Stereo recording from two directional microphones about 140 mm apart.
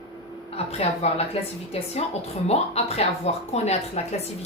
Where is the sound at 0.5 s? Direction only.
45° left (ahead or behind).